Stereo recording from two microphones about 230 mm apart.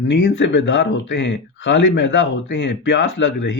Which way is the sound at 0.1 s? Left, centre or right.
Left.